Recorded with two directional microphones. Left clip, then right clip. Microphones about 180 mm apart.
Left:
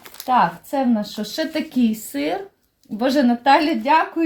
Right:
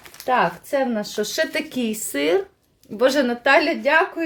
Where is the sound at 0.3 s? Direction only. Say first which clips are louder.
Left 2 dB; 35° right (ahead or behind).